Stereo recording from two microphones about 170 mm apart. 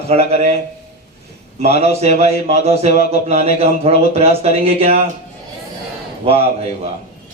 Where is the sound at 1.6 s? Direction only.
40° right (ahead or behind).